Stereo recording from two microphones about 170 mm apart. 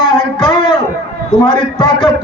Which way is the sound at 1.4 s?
30° left (ahead or behind).